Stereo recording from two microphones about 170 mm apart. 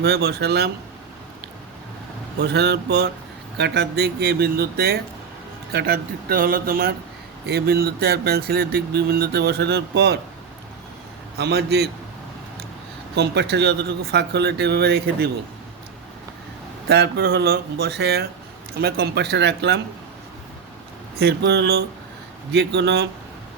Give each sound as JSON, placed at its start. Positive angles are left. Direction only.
{"t": 0.0, "sound": "speech", "side_deg": -75}
{"t": 2.4, "sound": "speech", "side_deg": -80}
{"t": 7.4, "sound": "speech", "side_deg": -70}
{"t": 11.3, "sound": "speech", "side_deg": -75}
{"t": 13.1, "sound": "speech", "side_deg": -75}
{"t": 16.9, "sound": "speech", "side_deg": -75}
{"t": 21.2, "sound": "speech", "side_deg": -80}